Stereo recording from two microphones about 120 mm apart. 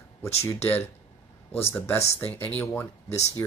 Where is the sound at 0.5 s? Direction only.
20° left (ahead or behind).